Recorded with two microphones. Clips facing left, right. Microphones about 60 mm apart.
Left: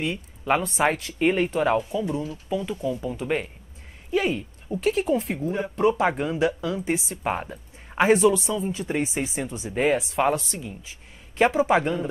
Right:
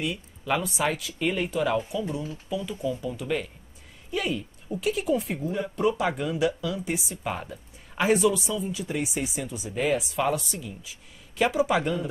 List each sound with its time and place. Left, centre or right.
0.0 s speech: left
4.7 s speech: centre
5.1 s speech: left
5.5 s speech: left